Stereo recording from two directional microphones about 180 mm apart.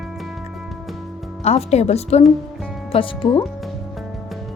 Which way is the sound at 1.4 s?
35° left (ahead or behind).